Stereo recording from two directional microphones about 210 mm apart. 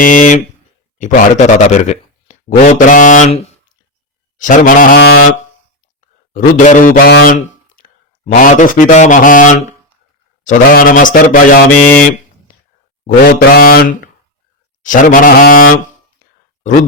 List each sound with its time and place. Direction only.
0.0 s speech: 40° left (ahead or behind)
6.3 s speech: 40° left (ahead or behind)
13.2 s speech: 45° left (ahead or behind)